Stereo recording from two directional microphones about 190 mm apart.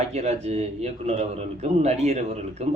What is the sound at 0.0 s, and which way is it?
A man's voice, 35° right (ahead or behind).